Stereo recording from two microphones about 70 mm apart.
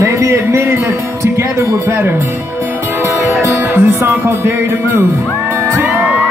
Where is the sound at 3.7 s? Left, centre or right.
Right.